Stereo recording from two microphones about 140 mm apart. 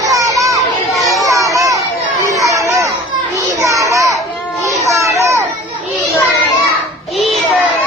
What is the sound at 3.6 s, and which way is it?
Children playing, 25° right (ahead or behind).